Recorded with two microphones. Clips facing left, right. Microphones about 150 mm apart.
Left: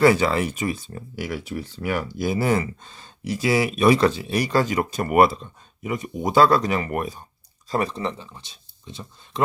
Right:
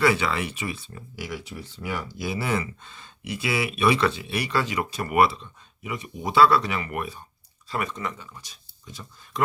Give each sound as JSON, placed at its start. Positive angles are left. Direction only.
{"t": 0.0, "sound": "speech", "side_deg": 40}
{"t": 1.2, "sound": "speech", "side_deg": 60}